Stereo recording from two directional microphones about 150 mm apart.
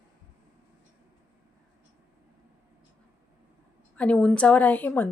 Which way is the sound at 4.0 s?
5° left (ahead or behind).